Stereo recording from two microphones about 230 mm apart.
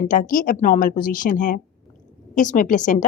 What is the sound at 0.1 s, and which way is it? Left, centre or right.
A woman's voice, left.